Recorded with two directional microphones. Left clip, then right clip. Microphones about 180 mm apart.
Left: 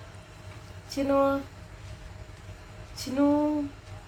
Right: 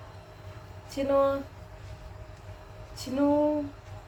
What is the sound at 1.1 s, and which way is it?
Speech, 25° left (ahead or behind).